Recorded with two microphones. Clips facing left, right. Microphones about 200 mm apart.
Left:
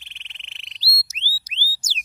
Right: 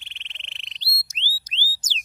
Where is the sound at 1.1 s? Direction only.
5° left (ahead or behind).